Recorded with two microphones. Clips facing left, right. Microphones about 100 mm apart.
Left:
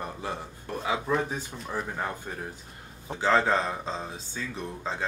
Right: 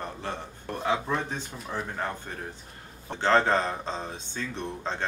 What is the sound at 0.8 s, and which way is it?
Speech, 5° left (ahead or behind).